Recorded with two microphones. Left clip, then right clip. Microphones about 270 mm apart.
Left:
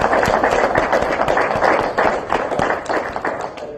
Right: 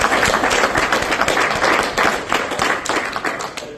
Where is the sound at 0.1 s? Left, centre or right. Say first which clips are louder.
Even; right.